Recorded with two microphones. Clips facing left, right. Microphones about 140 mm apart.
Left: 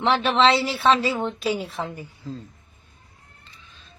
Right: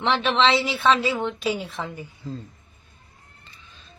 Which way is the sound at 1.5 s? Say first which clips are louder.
Left 2 dB; centre (ahead or behind).